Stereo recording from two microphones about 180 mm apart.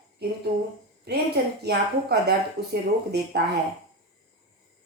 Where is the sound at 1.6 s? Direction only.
65° right (ahead or behind).